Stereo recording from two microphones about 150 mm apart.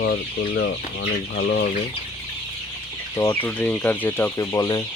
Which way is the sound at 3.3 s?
15° left (ahead or behind).